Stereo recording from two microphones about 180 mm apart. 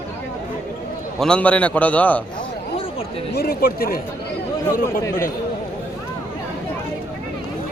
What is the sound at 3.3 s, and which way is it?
Speech, 60° left (ahead or behind).